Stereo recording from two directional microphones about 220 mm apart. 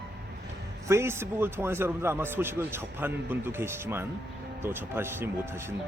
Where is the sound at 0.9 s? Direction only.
10° right (ahead or behind).